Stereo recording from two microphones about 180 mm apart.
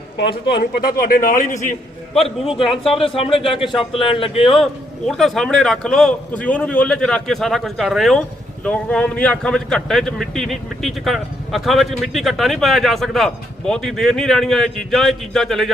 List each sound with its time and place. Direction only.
0.2 s a man's voice: 60° left (ahead or behind); by 1.7 s 45° left (ahead or behind)
2.2 s speech: 30° left (ahead or behind)
4.5 s speech: centre (ahead or behind)